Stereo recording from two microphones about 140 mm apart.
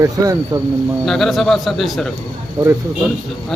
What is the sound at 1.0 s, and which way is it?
Speech, centre (ahead or behind).